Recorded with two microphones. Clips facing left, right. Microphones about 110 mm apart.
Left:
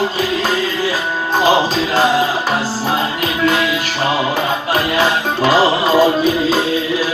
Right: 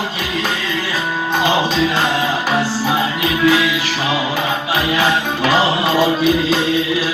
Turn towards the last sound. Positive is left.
turn(degrees=40)  # may be behind; listen again after turning